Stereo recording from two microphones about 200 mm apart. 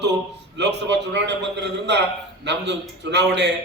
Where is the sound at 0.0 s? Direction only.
60° right (ahead or behind).